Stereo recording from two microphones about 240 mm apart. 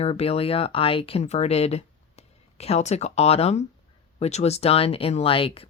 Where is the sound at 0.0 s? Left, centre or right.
Left.